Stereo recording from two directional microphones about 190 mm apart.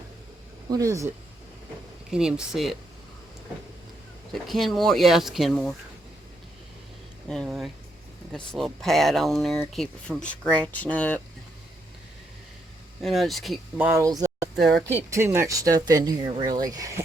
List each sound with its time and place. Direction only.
0.7 s speech: 15° right (ahead or behind)
2.0 s speech: 5° right (ahead or behind)
4.3 s speech: centre (ahead or behind)
7.3 s speech: centre (ahead or behind)
13.0 s speech: centre (ahead or behind)
13.7 s speech: 15° right (ahead or behind)